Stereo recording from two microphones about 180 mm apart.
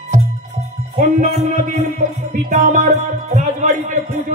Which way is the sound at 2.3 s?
45° right (ahead or behind).